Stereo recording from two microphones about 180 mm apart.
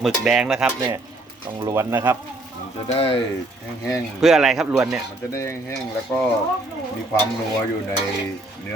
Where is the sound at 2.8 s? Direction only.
30° left (ahead or behind).